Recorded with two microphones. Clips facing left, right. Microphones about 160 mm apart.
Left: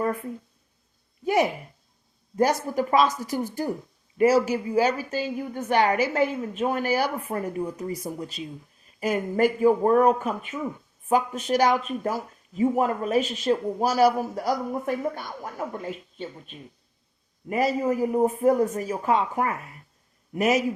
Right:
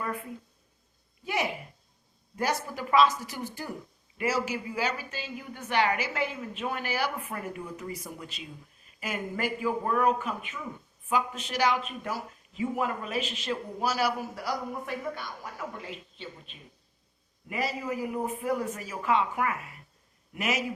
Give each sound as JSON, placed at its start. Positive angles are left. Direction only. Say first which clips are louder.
{"t": 1.2, "sound": "a man's voice", "louder": "left 9 dB", "side_deg": 45}